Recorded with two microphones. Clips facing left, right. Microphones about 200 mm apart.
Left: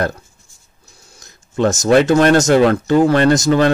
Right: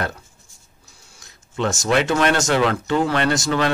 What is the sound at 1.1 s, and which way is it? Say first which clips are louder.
Speech: left 7 dB; 40° left (ahead or behind).